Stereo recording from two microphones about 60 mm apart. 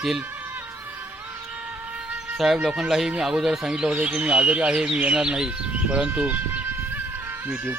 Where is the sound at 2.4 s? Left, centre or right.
Centre; by 6.6 s right.